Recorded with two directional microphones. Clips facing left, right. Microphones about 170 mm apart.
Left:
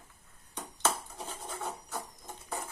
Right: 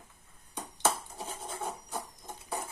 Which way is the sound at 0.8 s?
15° right (ahead or behind).